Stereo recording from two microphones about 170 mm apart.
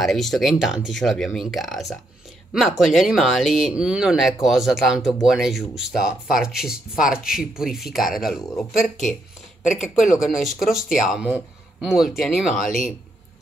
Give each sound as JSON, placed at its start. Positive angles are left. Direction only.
{"t": 0.0, "sound": "speech", "side_deg": 0}
{"t": 9.7, "sound": "speech", "side_deg": 45}
{"t": 10.1, "sound": "speech", "side_deg": 0}